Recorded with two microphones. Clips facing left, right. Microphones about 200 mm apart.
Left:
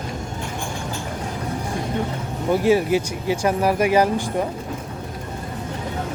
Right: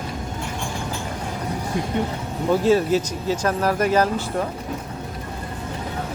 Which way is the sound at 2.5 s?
10° left (ahead or behind).